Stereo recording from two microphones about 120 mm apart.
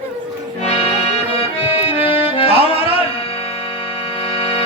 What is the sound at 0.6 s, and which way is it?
Music, 55° left (ahead or behind).